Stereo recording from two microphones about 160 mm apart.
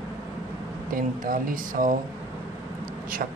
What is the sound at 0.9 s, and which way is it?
A man's voice, 60° right (ahead or behind).